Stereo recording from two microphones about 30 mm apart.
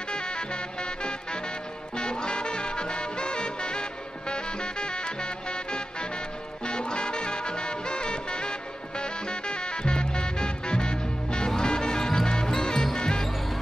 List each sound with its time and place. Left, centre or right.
0.1 s music: left
2.0 s music: left